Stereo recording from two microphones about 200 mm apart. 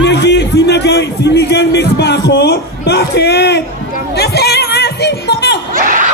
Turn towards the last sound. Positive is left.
turn(degrees=-45)  # may be behind; listen again after turning